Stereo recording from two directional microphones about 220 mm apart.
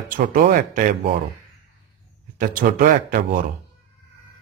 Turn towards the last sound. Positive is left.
turn(degrees=-40)  # may be behind; listen again after turning